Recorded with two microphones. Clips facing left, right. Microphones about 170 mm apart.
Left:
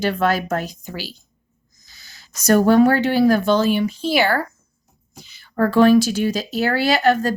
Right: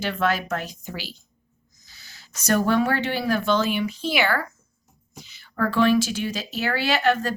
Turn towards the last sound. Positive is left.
turn(degrees=40)  # may be behind; listen again after turning